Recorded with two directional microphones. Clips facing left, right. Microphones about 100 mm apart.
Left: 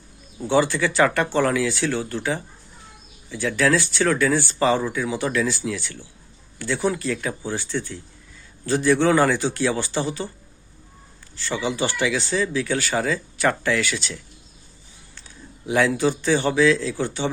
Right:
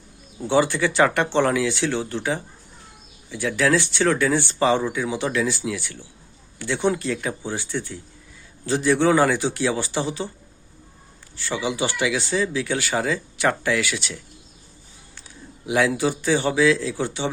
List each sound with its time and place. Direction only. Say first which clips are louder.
0.4 s speech: even; 20° right (ahead or behind)
11.3 s speech: even; 15° right (ahead or behind)
15.6 s speech: left 1 dB; 15° right (ahead or behind)